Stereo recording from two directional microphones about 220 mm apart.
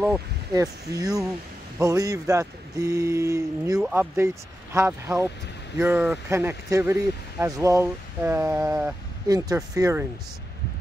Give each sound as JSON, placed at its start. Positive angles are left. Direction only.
{"t": 0.0, "sound": "speech", "side_deg": -15}